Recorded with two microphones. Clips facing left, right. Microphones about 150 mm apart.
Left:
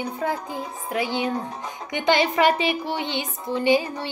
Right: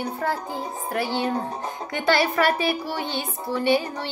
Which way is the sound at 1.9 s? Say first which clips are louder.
Left 1 dB; 20° left (ahead or behind).